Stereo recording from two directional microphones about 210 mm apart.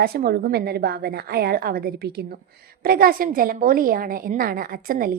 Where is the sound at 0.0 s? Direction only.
45° right (ahead or behind).